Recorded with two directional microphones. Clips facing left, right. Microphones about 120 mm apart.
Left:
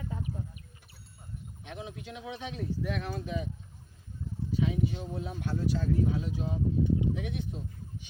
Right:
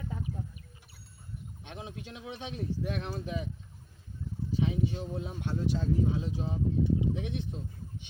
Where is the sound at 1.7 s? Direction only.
30° right (ahead or behind).